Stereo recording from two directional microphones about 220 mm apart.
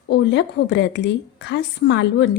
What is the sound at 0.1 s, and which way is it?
A woman's voice, 50° left (ahead or behind).